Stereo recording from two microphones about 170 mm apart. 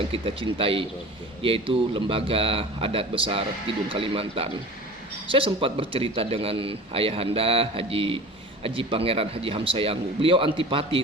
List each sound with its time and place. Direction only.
0.1 s a man's voice: 35° right (ahead or behind)